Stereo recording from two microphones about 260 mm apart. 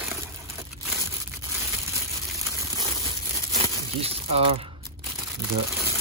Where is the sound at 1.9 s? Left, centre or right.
Centre.